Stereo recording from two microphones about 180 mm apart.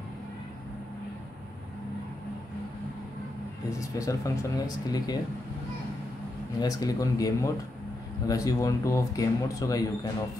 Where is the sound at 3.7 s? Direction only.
20° left (ahead or behind).